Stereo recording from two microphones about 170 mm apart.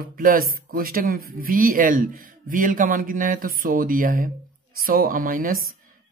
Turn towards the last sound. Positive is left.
turn(degrees=-55)  # may be behind; listen again after turning